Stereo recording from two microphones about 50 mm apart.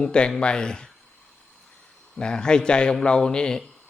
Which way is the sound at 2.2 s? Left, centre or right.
Centre.